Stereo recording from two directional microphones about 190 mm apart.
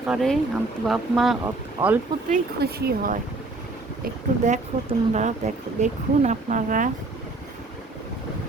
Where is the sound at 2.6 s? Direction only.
50° right (ahead or behind).